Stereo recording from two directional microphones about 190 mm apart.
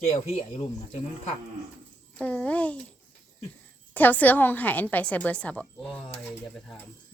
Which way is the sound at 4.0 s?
10° left (ahead or behind).